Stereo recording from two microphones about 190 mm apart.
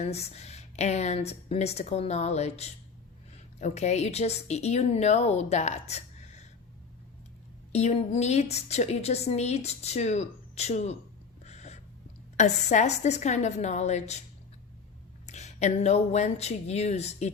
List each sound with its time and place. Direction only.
0.0 s a woman's voice: 35° left (ahead or behind)
7.7 s a woman's voice: 35° left (ahead or behind)
11.4 s a sound: 35° left (ahead or behind)
12.4 s a woman's voice: 40° left (ahead or behind)
15.3 s a woman's voice: 35° left (ahead or behind)